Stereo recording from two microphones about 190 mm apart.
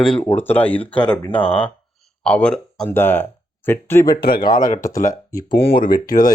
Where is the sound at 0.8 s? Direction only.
30° left (ahead or behind).